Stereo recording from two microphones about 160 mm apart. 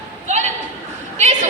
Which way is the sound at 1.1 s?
45° right (ahead or behind).